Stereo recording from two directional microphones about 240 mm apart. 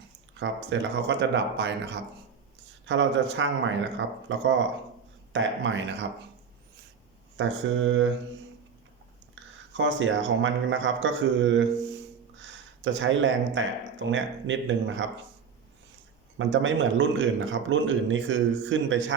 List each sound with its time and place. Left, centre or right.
0.3 s speech: right
7.3 s speech: right
9.3 s speech: right
16.4 s speech: right